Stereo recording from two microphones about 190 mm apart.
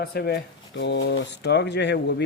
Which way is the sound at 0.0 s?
55° left (ahead or behind).